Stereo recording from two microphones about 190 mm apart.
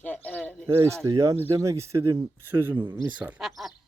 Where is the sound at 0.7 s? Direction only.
15° right (ahead or behind).